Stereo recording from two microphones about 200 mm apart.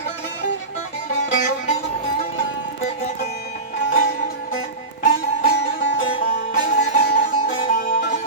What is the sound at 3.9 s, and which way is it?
Music, 45° left (ahead or behind).